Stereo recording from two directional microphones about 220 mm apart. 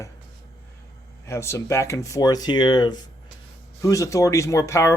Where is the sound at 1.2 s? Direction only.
10° left (ahead or behind).